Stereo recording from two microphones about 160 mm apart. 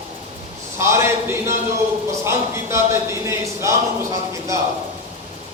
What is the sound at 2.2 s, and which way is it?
Speech, 15° right (ahead or behind).